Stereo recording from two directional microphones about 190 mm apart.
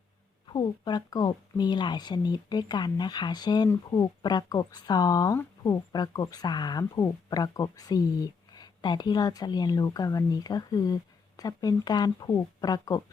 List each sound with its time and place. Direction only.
0.4 s speech: 25° left (ahead or behind)